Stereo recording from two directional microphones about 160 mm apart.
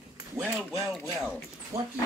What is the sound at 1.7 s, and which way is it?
Speech, 20° right (ahead or behind).